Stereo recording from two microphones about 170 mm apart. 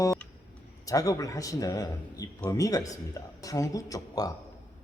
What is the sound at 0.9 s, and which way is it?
A man's voice, 20° left (ahead or behind).